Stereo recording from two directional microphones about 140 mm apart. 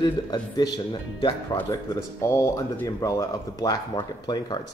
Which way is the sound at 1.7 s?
20° left (ahead or behind).